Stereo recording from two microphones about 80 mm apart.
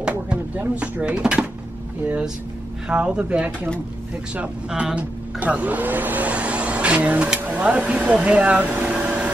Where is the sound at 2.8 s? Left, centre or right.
Centre.